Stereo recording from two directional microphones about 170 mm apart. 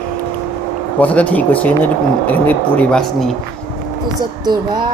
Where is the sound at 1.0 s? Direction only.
10° left (ahead or behind).